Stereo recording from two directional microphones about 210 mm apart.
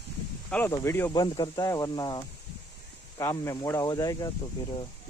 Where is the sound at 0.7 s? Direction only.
10° left (ahead or behind).